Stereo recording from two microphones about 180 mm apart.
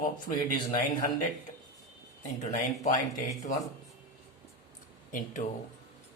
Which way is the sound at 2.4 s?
45° left (ahead or behind).